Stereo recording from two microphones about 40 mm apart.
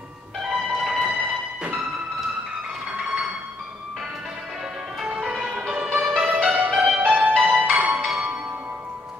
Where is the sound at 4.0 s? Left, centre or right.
Centre; by 8.0 s right.